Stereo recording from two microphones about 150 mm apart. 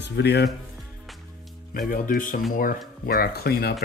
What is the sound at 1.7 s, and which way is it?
Speech, 75° left (ahead or behind).